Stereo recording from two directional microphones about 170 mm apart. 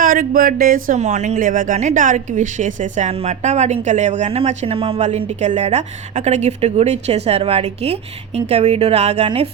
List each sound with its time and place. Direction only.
0.0 s speech: 55° right (ahead or behind); by 9.5 s 35° right (ahead or behind)